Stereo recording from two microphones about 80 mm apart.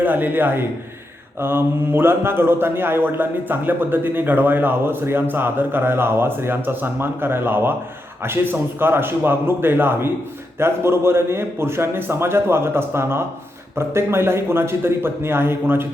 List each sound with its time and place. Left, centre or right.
0.0 s a man's voice: right